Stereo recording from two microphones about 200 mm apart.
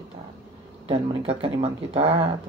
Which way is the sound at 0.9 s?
30° right (ahead or behind).